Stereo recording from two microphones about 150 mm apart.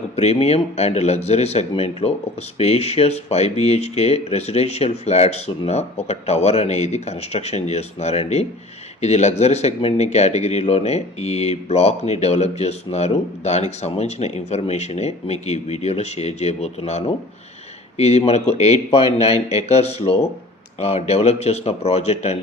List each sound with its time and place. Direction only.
0.2 s speech: 45° left (ahead or behind)